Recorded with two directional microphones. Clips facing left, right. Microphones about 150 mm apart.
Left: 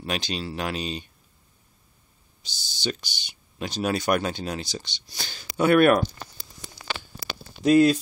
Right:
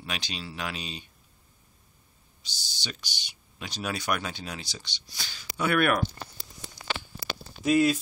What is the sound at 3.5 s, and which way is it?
Speech, 45° left (ahead or behind).